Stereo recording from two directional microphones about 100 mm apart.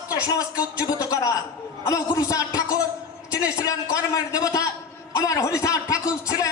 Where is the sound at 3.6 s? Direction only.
35° left (ahead or behind).